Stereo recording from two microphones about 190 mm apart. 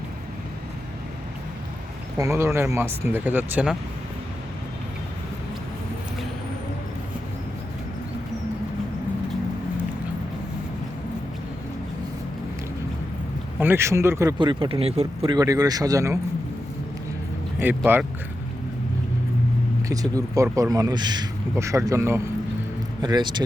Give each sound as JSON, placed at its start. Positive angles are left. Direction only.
{"t": 2.1, "sound": "speech", "side_deg": -15}
{"t": 13.6, "sound": "speech", "side_deg": -10}
{"t": 17.6, "sound": "speech", "side_deg": -10}
{"t": 19.9, "sound": "speech", "side_deg": -20}